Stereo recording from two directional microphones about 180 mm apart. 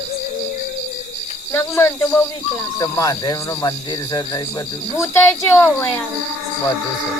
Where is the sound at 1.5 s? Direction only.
15° left (ahead or behind).